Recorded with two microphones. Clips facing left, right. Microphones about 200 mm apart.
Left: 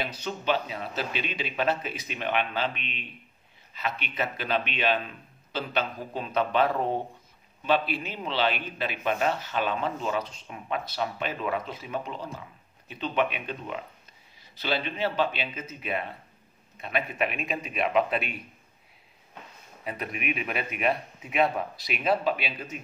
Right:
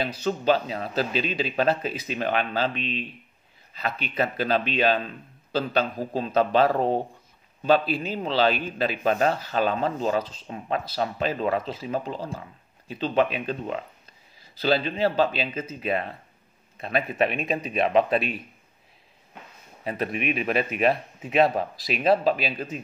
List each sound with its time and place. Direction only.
0.2 s speech: 35° right (ahead or behind)
19.8 s speech: 30° right (ahead or behind)